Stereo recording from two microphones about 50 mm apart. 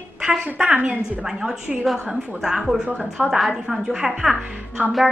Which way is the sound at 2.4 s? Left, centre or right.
Centre.